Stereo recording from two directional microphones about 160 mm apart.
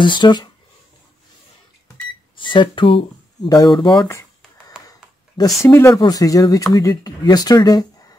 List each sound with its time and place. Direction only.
0.0 s speech: 30° left (ahead or behind)
2.3 s speech: 30° left (ahead or behind)
5.6 s speech: 15° left (ahead or behind)